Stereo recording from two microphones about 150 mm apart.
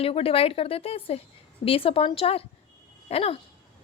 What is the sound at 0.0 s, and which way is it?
Speech, 40° left (ahead or behind).